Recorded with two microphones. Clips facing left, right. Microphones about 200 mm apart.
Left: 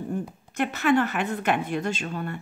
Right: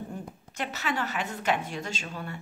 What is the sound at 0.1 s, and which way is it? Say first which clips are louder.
A woman's voice: left 8 dB; 55° left (ahead or behind).